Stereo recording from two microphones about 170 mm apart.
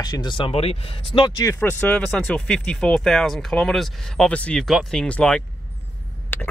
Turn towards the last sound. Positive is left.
turn(degrees=10)  # may be behind; listen again after turning